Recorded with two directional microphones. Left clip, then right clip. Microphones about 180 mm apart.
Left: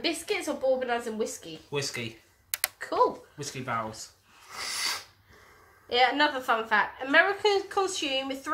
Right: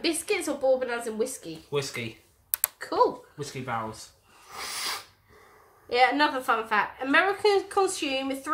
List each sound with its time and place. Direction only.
0.0 s a woman's voice: 20° right (ahead or behind)
1.7 s speech: 15° left (ahead or behind)
3.3 s speech: 15° left (ahead or behind)
4.5 s sneeze: 10° left (ahead or behind)
5.9 s a woman's voice: 15° right (ahead or behind)